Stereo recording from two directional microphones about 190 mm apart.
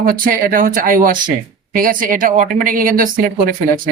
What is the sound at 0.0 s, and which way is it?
Speech, 50° right (ahead or behind).